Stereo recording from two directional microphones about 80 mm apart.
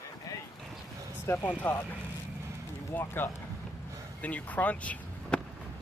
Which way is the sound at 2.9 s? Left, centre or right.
Left.